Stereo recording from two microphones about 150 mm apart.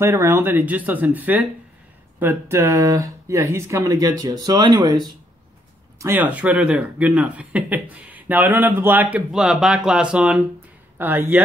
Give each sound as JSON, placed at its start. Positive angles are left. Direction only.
{"t": 0.0, "sound": "speech", "side_deg": -15}
{"t": 5.9, "sound": "speech", "side_deg": -15}